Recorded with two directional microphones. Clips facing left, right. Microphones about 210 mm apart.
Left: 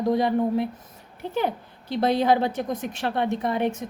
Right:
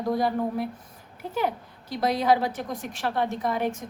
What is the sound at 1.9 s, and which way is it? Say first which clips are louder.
A woman's voice: left 2 dB; 25° left (ahead or behind).